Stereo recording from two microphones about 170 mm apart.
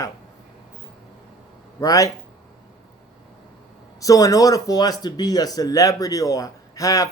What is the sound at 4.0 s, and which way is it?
Speech, 20° left (ahead or behind).